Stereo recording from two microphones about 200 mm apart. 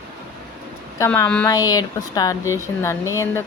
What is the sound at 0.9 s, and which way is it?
Speech, 15° left (ahead or behind).